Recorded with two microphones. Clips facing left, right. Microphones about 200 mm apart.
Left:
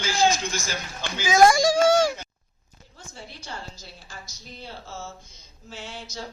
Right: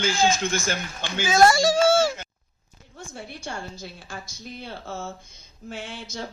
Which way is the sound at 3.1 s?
55° right (ahead or behind).